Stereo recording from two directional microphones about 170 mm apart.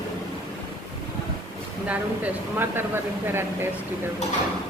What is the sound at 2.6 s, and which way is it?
Speech, 15° right (ahead or behind).